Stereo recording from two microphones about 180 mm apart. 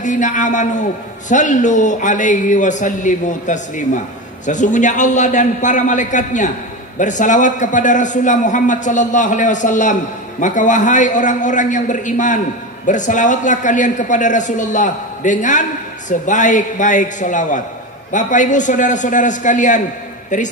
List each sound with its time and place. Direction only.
0.0 s a man's voice: 45° left (ahead or behind)